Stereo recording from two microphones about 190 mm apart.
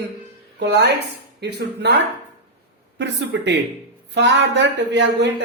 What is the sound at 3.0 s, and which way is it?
Speech, 65° right (ahead or behind).